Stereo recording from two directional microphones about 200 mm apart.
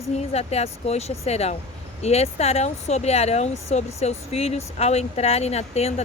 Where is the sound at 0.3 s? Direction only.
30° left (ahead or behind).